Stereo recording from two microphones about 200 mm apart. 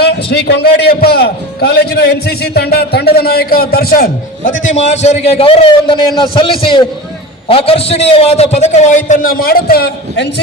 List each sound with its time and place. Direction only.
0.0 s a man's voice: 55° left (ahead or behind)
4.6 s a man's voice: 35° left (ahead or behind)
9.0 s a man's voice: 45° left (ahead or behind)